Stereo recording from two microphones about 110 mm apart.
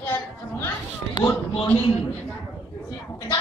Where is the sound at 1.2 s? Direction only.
15° left (ahead or behind).